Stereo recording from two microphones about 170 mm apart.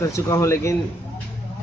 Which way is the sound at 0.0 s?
15° left (ahead or behind).